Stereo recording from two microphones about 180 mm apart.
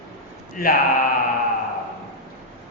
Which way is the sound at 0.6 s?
50° left (ahead or behind).